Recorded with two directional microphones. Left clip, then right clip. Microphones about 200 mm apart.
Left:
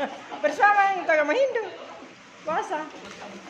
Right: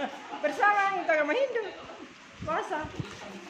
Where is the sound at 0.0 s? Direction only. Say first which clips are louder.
Left 5 dB; 25° left (ahead or behind).